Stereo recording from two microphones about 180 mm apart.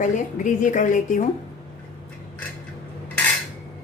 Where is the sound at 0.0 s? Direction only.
45° left (ahead or behind).